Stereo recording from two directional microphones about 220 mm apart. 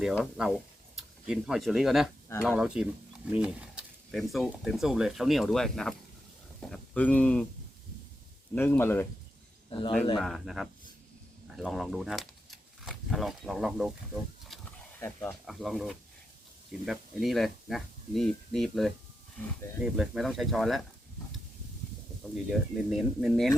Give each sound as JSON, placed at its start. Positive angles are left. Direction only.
{"t": 0.0, "sound": "speech", "side_deg": -5}
{"t": 8.5, "sound": "speech", "side_deg": 10}
{"t": 9.6, "sound": "a man's voice", "side_deg": 25}
{"t": 10.2, "sound": "speech", "side_deg": 0}
{"t": 14.4, "sound": "wild animals", "side_deg": 0}
{"t": 15.0, "sound": "speech", "side_deg": 10}
{"t": 15.4, "sound": "speech", "side_deg": 0}
{"t": 22.4, "sound": "speech", "side_deg": 0}